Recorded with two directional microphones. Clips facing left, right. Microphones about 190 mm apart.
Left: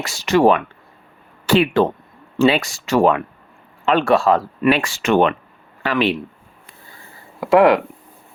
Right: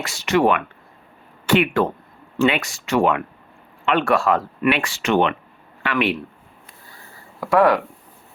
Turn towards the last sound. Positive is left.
turn(degrees=20)  # may be behind; listen again after turning